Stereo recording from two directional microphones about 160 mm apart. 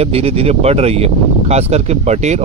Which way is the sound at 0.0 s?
40° right (ahead or behind).